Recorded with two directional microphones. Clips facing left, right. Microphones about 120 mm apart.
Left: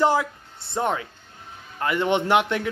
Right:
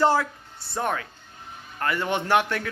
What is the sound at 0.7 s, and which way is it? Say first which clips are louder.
A man's voice: left 3 dB; 20° left (ahead or behind).